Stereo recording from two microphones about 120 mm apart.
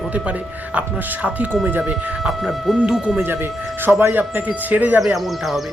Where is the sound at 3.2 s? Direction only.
20° right (ahead or behind).